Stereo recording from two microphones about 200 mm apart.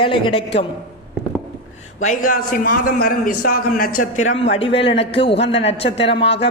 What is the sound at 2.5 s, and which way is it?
A man's voice, 45° left (ahead or behind).